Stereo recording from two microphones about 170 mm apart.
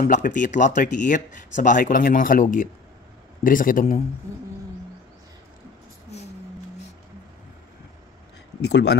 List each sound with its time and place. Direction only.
0.0 s speech: 50° left (ahead or behind)
8.6 s speech: 80° left